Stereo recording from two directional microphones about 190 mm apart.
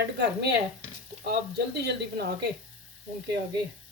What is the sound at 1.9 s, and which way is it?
Speech, 60° right (ahead or behind).